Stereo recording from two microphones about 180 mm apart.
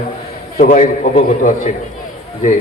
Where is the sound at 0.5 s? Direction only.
45° left (ahead or behind).